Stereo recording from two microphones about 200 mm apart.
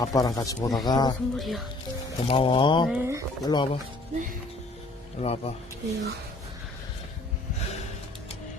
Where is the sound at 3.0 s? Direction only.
15° right (ahead or behind).